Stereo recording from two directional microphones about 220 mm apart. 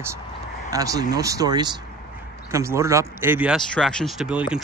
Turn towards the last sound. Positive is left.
turn(degrees=-5)  # may be behind; listen again after turning